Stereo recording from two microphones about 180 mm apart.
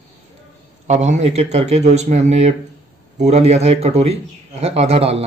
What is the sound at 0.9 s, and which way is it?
A man's voice, 40° right (ahead or behind).